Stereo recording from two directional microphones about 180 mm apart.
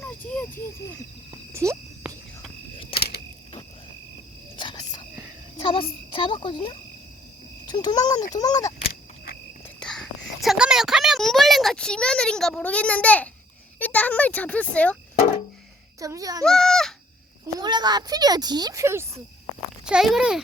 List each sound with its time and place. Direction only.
0.0 s cricket: 10° left (ahead or behind)
1.3 s insect: 15° right (ahead or behind)
2.9 s a sound: 60° left (ahead or behind)
4.5 s whispering: 25° left (ahead or behind)
5.6 s a child's voice: 30° left (ahead or behind)
9.8 s a sound: 5° left (ahead or behind)
13.7 s a child's voice: 10° left (ahead or behind)
16.0 s a child's voice: 20° right (ahead or behind)
16.4 s goat: centre (ahead or behind)
17.6 s a child's voice: 25° right (ahead or behind)
19.8 s a child's voice: 5° right (ahead or behind)